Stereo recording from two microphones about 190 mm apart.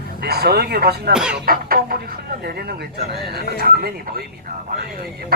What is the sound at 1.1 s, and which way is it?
Speech, 5° right (ahead or behind).